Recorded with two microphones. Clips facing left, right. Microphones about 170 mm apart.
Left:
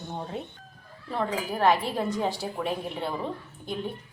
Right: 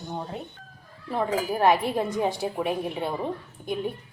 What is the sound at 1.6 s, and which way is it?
A woman's voice, 15° right (ahead or behind).